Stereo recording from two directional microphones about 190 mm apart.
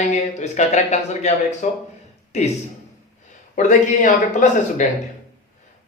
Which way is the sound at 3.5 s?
40° left (ahead or behind).